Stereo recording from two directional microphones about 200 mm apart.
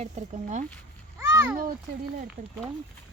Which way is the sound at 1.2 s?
15° right (ahead or behind).